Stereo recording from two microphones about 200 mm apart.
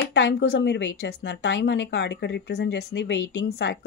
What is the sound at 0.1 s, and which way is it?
Speech, 60° left (ahead or behind).